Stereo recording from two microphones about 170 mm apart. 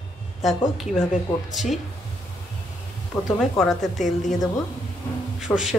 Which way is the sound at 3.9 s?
45° left (ahead or behind).